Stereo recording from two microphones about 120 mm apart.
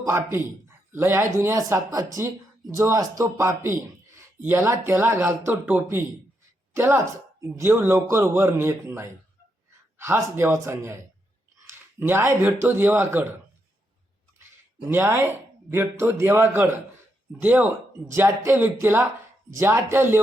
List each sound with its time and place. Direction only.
0.0 s speech: 20° right (ahead or behind)
11.6 s a sound: 20° right (ahead or behind)
12.6 s speech: 15° right (ahead or behind)
14.8 s speech: 20° right (ahead or behind)